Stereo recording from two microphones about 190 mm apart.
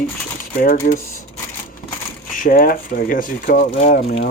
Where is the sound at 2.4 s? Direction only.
50° left (ahead or behind).